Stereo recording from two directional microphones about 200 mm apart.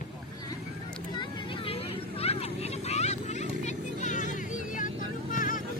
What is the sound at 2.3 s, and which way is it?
Vehicle, 30° left (ahead or behind).